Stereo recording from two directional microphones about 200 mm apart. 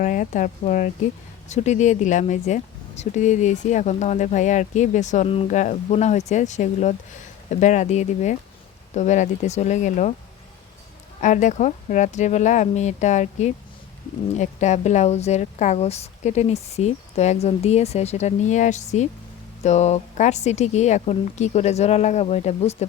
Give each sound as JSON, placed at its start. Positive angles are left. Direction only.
{"t": 0.0, "sound": "speech", "side_deg": 40}
{"t": 11.2, "sound": "speech", "side_deg": 35}